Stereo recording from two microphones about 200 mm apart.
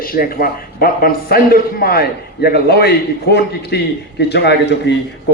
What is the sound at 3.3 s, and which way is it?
A man's voice, 55° left (ahead or behind).